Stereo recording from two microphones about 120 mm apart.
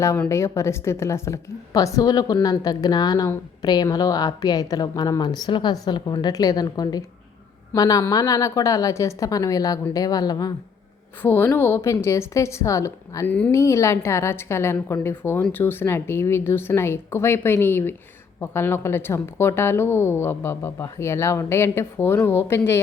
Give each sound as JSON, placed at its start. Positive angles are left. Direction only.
{"t": 0.3, "sound": "a woman's voice", "side_deg": 25}
{"t": 11.2, "sound": "a woman's voice", "side_deg": 15}